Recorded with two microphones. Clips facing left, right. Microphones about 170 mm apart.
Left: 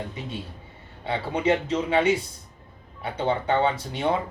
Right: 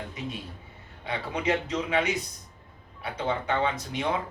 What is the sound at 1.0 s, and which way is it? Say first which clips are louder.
Speech: left 5 dB; 30° left (ahead or behind).